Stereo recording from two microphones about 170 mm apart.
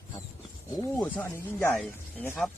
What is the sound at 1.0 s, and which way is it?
Speech, 10° left (ahead or behind).